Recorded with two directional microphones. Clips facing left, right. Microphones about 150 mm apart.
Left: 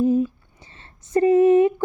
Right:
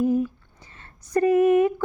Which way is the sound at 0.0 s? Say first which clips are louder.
Left 3 dB; 20° left (ahead or behind).